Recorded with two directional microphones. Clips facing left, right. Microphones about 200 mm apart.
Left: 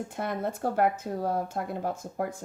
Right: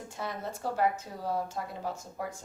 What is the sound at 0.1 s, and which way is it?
Speech, 55° left (ahead or behind).